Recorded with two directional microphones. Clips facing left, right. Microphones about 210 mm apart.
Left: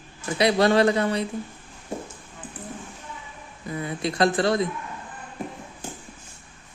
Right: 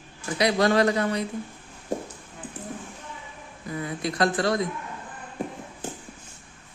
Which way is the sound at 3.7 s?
25° left (ahead or behind).